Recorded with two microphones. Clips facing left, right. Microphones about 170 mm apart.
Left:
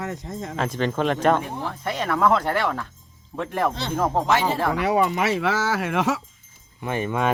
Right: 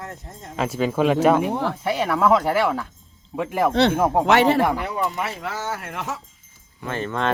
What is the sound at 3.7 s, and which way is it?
Speech, 65° right (ahead or behind).